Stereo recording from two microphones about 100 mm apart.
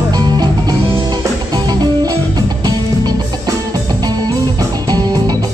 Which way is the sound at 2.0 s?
40° right (ahead or behind).